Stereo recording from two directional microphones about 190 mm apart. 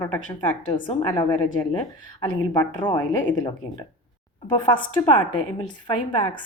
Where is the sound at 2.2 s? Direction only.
25° left (ahead or behind).